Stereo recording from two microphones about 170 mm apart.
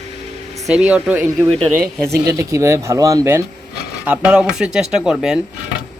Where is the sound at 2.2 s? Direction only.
20° right (ahead or behind).